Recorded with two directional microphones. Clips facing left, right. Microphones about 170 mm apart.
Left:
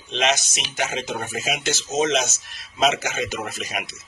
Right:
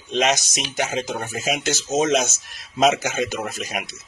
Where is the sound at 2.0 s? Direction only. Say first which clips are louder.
Right 1 dB; 45° right (ahead or behind).